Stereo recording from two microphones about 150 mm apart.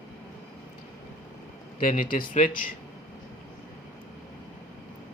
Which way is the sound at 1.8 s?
60° left (ahead or behind).